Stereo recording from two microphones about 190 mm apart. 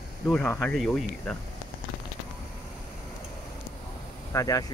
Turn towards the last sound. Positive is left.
turn(degrees=20)  # may be behind; listen again after turning